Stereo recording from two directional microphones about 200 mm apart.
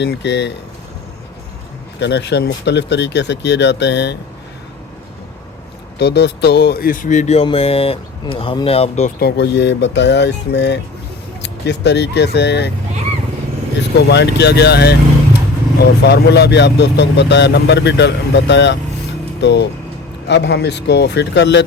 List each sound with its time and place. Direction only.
0.0 s speech: 60° left (ahead or behind)
2.0 s speech: 60° left (ahead or behind)
6.0 s speech: 55° left (ahead or behind); by 9.1 s 30° left (ahead or behind)
9.1 s speech: 55° left (ahead or behind)
13.9 s speech: 60° left (ahead or behind)